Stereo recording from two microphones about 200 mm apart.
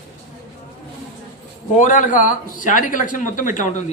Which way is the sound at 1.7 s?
40° left (ahead or behind).